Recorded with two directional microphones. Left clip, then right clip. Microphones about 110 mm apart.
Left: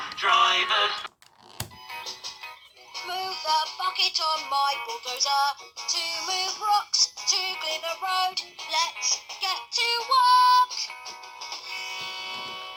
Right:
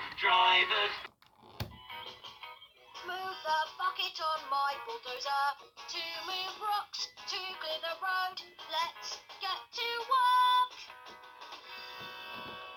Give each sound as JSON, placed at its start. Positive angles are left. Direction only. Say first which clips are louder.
{"t": 0.2, "sound": "synthetic singing", "louder": "left 5 dB", "side_deg": 25}
{"t": 2.9, "sound": "music", "louder": "left 8 dB", "side_deg": 40}